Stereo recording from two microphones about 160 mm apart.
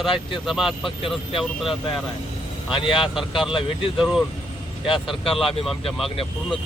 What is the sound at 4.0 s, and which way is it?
Speech, centre (ahead or behind).